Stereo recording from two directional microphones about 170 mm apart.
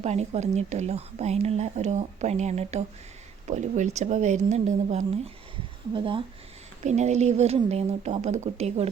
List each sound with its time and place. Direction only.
0.0 s a woman's voice: 40° right (ahead or behind)
6.8 s a woman's voice: 40° right (ahead or behind)